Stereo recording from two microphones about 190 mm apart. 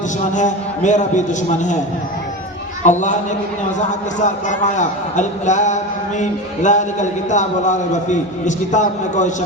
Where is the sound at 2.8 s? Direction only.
40° left (ahead or behind).